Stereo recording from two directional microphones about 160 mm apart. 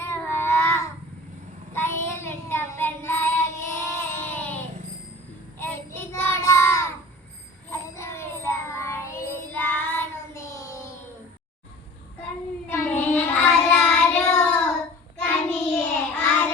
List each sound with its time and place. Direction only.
0.0 s child singing: 15° left (ahead or behind)
7.7 s music: 15° left (ahead or behind)
12.6 s child singing: 10° left (ahead or behind)